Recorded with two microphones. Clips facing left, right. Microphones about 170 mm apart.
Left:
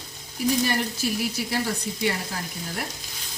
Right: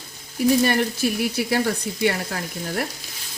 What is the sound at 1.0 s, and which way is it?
Frying, 55° right (ahead or behind).